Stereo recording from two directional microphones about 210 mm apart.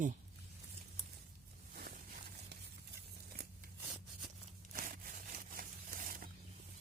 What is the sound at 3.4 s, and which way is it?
Scissors, 50° right (ahead or behind).